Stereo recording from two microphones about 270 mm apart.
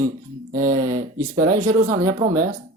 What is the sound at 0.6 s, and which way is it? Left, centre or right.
Speech, right.